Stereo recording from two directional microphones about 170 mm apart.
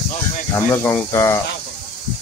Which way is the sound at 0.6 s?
10° left (ahead or behind).